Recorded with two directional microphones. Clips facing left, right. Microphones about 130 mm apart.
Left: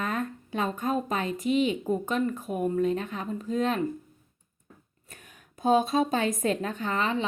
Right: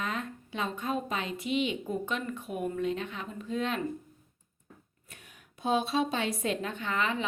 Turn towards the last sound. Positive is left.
turn(degrees=35)  # may be behind; listen again after turning